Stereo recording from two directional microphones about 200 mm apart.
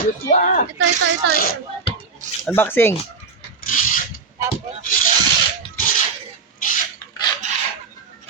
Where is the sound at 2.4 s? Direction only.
10° left (ahead or behind).